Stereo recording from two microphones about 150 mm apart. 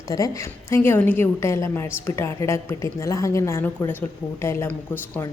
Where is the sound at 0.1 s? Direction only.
20° left (ahead or behind).